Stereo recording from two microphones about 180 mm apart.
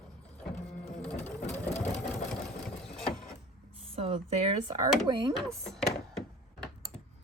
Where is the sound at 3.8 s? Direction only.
30° right (ahead or behind).